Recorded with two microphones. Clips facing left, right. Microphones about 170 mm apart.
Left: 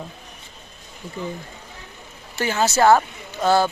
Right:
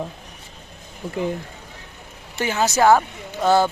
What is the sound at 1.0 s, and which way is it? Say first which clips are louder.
Speech: right 6 dB; 55° right (ahead or behind).